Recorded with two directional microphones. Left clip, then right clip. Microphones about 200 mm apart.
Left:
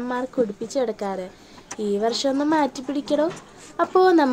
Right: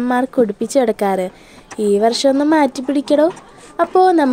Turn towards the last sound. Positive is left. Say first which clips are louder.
# right 5 dB
turn(degrees=-25)  # may be behind; listen again after turning